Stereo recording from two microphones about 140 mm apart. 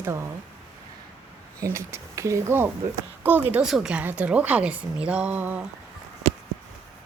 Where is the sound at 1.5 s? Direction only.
20° right (ahead or behind).